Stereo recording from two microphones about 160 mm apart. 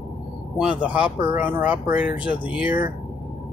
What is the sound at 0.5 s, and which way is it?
Speech, 5° right (ahead or behind).